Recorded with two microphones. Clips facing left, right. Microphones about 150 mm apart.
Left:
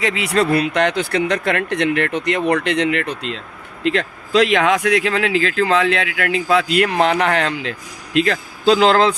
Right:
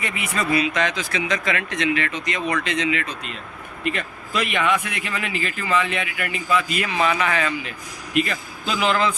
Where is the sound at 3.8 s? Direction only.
90° left; by 7.7 s 70° left (ahead or behind).